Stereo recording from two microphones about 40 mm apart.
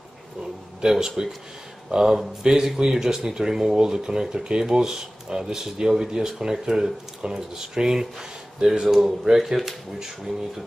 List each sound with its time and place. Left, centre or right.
0.7 s speech: centre
8.8 s speech: centre